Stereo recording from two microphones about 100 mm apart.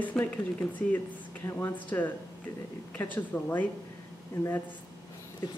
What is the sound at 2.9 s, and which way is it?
Speech, 20° left (ahead or behind).